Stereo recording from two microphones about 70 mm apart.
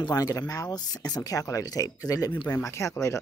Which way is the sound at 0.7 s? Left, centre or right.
Left.